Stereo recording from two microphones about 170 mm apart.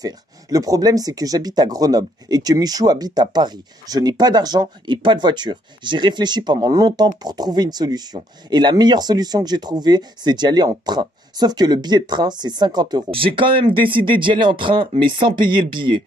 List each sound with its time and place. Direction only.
0.0 s speech: 20° right (ahead or behind)